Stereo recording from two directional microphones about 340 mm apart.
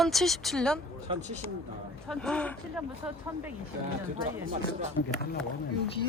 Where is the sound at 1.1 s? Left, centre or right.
Centre.